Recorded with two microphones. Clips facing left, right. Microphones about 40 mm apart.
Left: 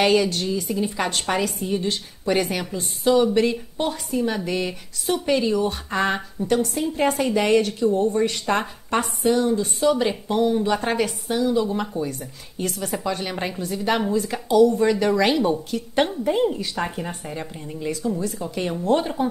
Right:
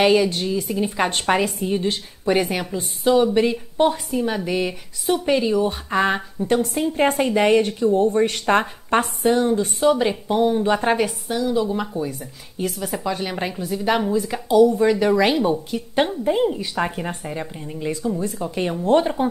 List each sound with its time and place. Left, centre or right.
0.0 s speech: centre
0.7 s a woman's voice: right
6.4 s a woman's voice: right
9.5 s a woman's voice: right
9.9 s speech: centre
10.6 s a woman's voice: right
11.2 s speech: centre
18.2 s a woman's voice: right